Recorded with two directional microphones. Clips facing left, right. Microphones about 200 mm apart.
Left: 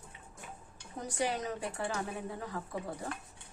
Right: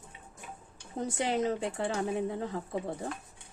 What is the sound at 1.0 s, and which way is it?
Speech, 25° right (ahead or behind).